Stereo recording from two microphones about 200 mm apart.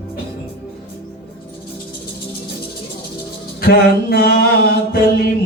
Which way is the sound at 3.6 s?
50° left (ahead or behind).